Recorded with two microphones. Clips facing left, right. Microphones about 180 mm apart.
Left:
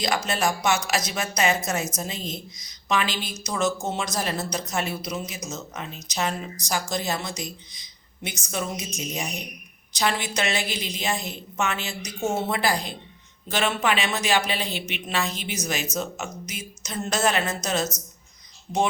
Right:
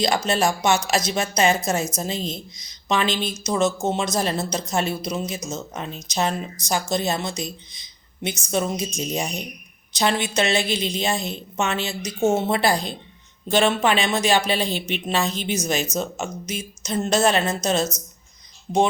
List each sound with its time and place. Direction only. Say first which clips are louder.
0.0 s a woman's voice: right 4 dB; 30° right (ahead or behind)